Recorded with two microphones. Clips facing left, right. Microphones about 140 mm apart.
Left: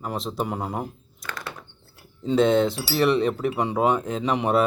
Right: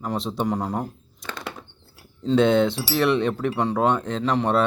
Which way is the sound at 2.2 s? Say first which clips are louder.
Right 1 dB; centre (ahead or behind).